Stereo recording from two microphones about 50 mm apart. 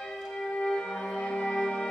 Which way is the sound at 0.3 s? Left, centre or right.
Centre.